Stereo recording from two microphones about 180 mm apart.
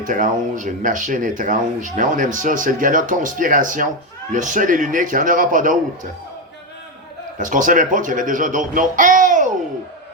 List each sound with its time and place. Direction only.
0.0 s speech: 45° right (ahead or behind)
7.3 s speech: 45° right (ahead or behind)